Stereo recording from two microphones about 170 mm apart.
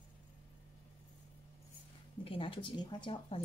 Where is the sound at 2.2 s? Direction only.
30° left (ahead or behind).